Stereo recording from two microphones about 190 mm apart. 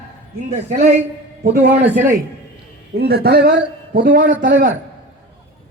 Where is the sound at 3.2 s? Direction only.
55° right (ahead or behind).